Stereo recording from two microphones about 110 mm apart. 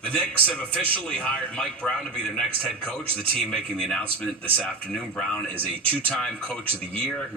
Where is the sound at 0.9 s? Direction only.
10° left (ahead or behind).